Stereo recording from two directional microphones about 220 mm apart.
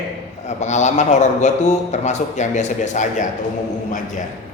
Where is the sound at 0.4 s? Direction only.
30° left (ahead or behind).